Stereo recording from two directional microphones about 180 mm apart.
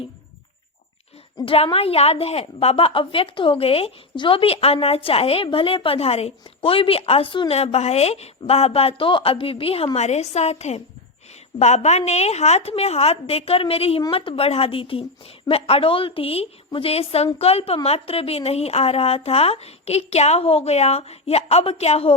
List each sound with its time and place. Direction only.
1.4 s a woman's voice: 30° left (ahead or behind)